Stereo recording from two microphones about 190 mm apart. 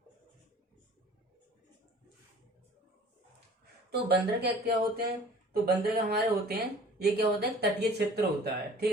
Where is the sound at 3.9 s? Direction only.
55° right (ahead or behind).